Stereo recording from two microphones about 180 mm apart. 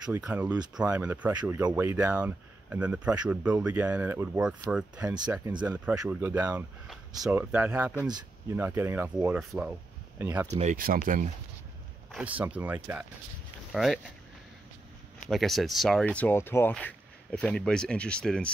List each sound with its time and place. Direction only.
0.1 s speech: 10° right (ahead or behind)
5.0 s speech: 20° right (ahead or behind)
10.6 s speech: 50° right (ahead or behind)
12.1 s speech: 5° right (ahead or behind)
13.7 s speech: centre (ahead or behind)
15.1 s speech: centre (ahead or behind)